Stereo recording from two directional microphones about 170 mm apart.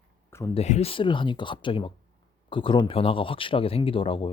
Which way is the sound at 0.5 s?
40° left (ahead or behind).